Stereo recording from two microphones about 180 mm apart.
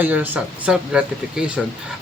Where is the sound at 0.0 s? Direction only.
10° right (ahead or behind).